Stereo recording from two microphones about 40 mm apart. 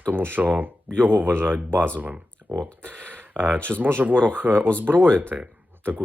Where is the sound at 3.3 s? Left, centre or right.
Right.